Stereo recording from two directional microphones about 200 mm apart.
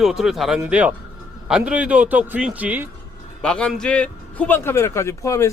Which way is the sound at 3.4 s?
5° left (ahead or behind).